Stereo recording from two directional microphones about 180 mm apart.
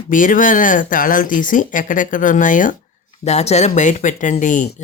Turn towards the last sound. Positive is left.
turn(degrees=45)  # may be behind; listen again after turning